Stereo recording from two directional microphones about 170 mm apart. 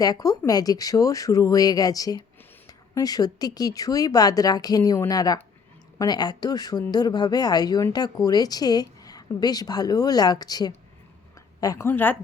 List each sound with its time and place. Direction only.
0.0 s a woman's voice: 20° left (ahead or behind)